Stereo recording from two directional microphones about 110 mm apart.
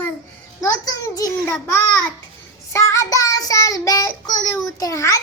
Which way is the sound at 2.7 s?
25° left (ahead or behind).